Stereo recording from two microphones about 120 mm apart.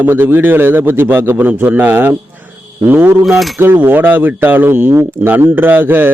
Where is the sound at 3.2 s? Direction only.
Centre (ahead or behind).